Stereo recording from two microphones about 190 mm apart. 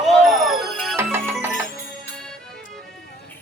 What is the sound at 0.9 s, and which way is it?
Music, 10° right (ahead or behind).